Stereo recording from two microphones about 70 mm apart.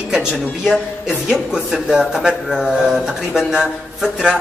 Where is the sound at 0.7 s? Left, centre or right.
Centre.